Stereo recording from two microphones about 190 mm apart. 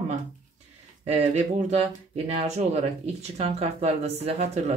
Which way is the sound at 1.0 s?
35° right (ahead or behind).